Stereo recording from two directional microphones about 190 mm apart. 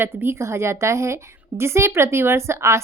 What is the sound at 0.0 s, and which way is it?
A woman's voice, 10° right (ahead or behind).